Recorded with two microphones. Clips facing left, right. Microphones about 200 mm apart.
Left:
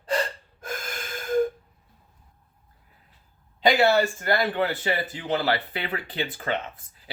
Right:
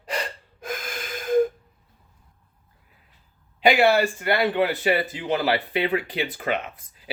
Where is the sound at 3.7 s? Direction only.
15° right (ahead or behind).